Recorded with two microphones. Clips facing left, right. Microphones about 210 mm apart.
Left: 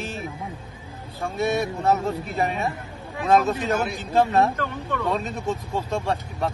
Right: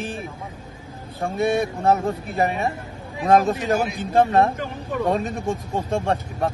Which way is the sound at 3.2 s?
45° right (ahead or behind).